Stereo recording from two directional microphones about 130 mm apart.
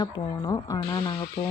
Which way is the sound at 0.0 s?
30° left (ahead or behind).